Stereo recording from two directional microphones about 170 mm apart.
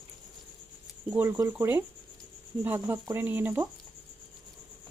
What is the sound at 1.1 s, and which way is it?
Speech, 15° right (ahead or behind).